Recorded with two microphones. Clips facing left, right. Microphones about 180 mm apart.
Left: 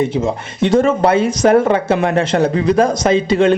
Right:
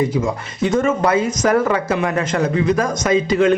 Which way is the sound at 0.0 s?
25° left (ahead or behind).